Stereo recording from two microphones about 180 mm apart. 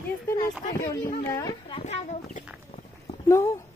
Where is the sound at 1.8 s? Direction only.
40° left (ahead or behind).